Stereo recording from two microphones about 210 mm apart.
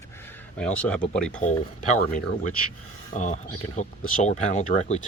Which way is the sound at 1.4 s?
35° left (ahead or behind).